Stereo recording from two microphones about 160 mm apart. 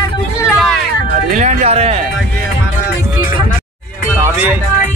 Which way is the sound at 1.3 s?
50° right (ahead or behind).